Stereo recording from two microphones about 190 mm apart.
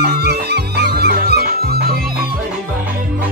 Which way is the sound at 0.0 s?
55° right (ahead or behind).